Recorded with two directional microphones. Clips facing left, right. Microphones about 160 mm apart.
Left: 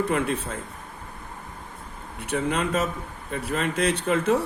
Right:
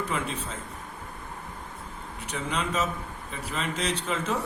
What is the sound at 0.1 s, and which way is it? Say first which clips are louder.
Speech: left 6 dB; 55° left (ahead or behind).